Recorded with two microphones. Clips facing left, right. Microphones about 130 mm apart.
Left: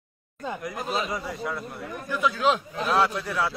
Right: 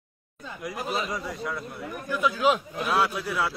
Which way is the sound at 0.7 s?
Centre (ahead or behind).